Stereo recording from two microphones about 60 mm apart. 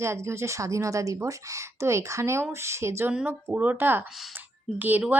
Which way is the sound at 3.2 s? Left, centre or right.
Right.